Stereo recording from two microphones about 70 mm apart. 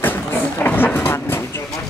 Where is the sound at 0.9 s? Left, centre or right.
Left.